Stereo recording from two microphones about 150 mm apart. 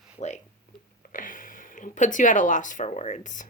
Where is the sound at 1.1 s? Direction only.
65° left (ahead or behind).